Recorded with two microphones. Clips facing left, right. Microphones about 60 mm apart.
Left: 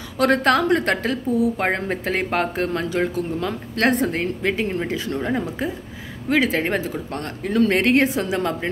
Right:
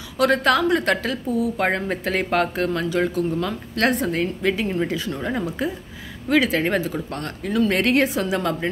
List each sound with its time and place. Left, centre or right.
0.2 s a woman's voice: left